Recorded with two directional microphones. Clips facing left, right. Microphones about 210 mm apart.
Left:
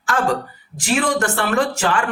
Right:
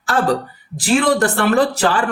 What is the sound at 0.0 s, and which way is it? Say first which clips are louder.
Speech: right 3 dB; 35° right (ahead or behind).